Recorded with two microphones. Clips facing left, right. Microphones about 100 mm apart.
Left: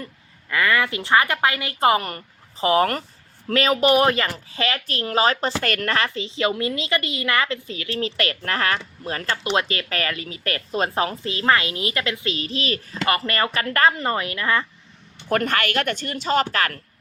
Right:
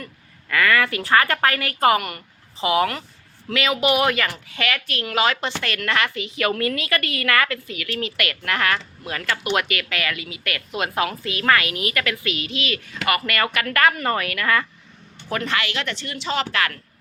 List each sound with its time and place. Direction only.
0.0 s a woman's voice: 20° left (ahead or behind)
15.3 s a woman's voice: 45° left (ahead or behind)